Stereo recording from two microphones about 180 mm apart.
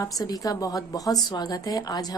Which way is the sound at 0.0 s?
20° left (ahead or behind).